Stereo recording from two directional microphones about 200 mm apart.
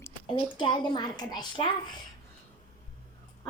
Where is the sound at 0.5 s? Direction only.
25° left (ahead or behind).